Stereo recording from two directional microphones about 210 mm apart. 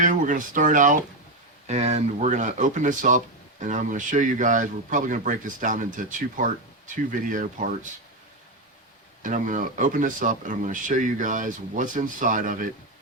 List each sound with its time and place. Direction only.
0.0 s a man's voice: 40° right (ahead or behind)
9.2 s a man's voice: 40° right (ahead or behind)